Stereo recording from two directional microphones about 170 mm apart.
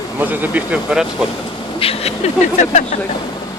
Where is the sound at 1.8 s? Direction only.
35° left (ahead or behind).